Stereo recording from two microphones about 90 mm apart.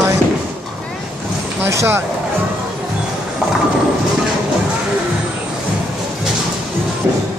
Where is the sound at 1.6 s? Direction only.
30° right (ahead or behind).